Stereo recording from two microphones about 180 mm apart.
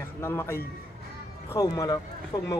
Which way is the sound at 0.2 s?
15° left (ahead or behind).